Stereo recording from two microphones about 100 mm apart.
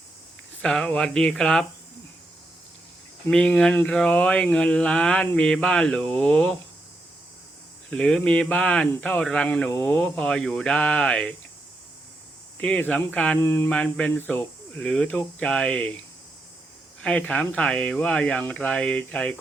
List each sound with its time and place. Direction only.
0.6 s speech: 5° left (ahead or behind)
3.2 s speech: 10° left (ahead or behind)
7.9 s speech: 10° left (ahead or behind)
12.5 s speech: 15° left (ahead or behind)
13.4 s mantra: 20° left (ahead or behind)
13.7 s speech: 10° left (ahead or behind)
17.0 s speech: 10° left (ahead or behind)